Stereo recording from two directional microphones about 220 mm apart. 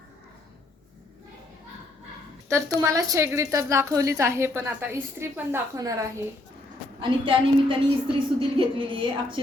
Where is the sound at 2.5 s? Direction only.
15° right (ahead or behind).